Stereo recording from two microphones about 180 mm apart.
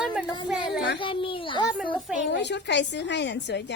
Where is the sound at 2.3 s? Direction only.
75° left (ahead or behind).